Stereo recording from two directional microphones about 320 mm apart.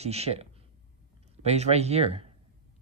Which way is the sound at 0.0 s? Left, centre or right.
Centre.